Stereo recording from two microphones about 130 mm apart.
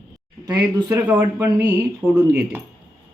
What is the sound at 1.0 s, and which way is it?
Speech, 15° right (ahead or behind).